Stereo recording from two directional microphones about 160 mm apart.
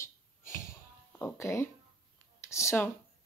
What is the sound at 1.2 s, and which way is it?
Speech, 15° left (ahead or behind).